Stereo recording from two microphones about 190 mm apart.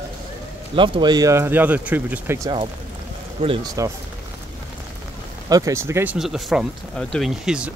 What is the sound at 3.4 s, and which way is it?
Speech, 30° right (ahead or behind).